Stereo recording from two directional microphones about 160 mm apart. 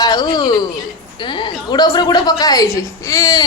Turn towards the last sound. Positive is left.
turn(degrees=25)  # may be behind; listen again after turning